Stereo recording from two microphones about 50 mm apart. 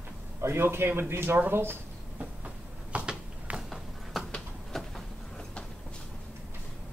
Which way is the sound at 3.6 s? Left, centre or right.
Centre.